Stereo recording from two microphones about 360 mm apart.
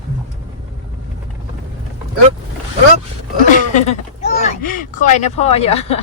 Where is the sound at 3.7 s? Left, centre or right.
Centre.